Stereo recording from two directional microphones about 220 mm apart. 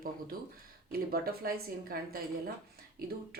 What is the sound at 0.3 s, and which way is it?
Speech, 40° right (ahead or behind).